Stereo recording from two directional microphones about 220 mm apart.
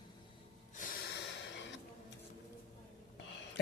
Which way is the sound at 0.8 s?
50° left (ahead or behind).